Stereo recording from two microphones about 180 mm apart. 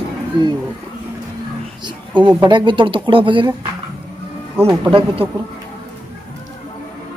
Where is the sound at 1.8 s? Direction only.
25° right (ahead or behind).